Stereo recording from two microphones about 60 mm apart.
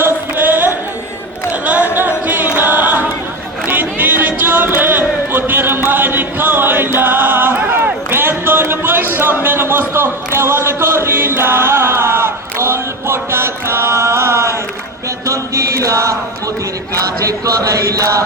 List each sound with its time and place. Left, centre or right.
0.0 s music: right
1.5 s a sound: right
2.0 s a capella: right
2.6 s choir: right
3.7 s a sound: right
15.3 s chant: right
17.2 s chant: right